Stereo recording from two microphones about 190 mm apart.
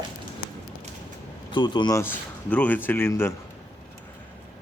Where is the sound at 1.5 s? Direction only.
25° left (ahead or behind).